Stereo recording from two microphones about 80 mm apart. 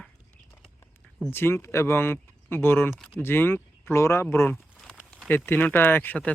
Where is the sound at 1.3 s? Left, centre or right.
Left.